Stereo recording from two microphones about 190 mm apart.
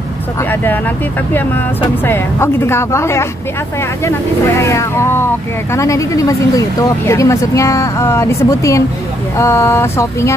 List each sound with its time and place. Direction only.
2.0 s speech: 15° left (ahead or behind)
4.6 s speech: 15° left (ahead or behind)